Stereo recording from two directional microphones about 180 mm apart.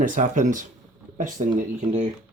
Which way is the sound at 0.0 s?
45° right (ahead or behind).